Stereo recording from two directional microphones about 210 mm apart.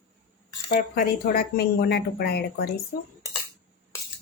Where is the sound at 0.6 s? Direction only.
40° left (ahead or behind).